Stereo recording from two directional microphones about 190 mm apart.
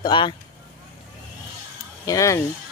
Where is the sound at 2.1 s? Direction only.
15° left (ahead or behind).